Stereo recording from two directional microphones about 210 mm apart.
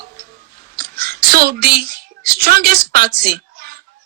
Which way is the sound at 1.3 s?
50° right (ahead or behind).